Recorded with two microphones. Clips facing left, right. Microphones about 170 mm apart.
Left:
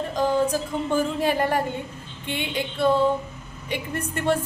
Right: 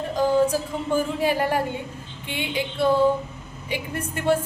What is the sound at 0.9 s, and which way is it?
A woman's voice, 10° right (ahead or behind).